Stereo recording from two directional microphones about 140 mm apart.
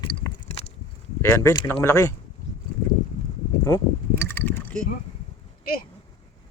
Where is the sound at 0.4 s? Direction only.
45° left (ahead or behind).